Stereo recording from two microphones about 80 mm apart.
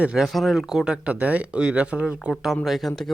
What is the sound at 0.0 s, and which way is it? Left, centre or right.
Speech, centre.